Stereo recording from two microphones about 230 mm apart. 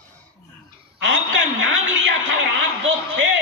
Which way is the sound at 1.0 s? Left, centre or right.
Right.